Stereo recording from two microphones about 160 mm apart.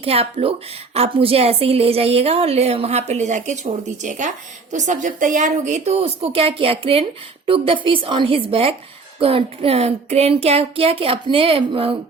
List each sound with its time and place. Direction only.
0.0 s a woman's voice: 40° right (ahead or behind)